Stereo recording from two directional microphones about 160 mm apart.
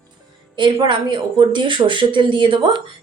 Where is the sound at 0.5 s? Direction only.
30° right (ahead or behind).